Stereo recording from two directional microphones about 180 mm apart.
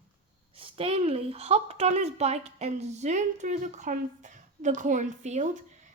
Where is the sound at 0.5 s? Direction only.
30° right (ahead or behind).